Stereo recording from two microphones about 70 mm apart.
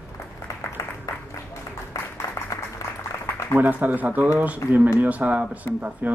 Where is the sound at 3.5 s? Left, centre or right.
Right.